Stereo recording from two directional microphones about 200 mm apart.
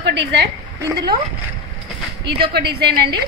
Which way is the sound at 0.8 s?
20° right (ahead or behind).